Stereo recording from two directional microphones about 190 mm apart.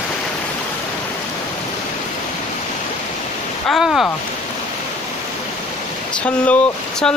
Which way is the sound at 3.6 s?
Centre (ahead or behind).